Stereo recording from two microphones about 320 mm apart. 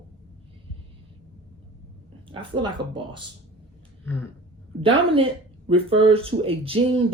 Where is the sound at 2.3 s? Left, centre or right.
Centre.